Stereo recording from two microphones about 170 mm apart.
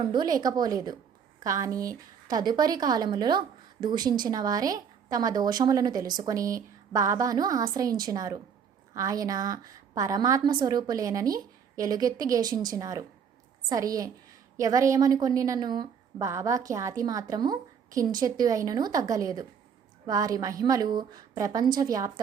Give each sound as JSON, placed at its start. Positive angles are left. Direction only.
{"t": 0.0, "sound": "a woman's voice", "side_deg": -25}